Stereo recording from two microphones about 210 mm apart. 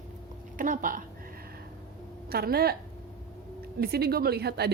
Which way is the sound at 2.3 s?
45° right (ahead or behind).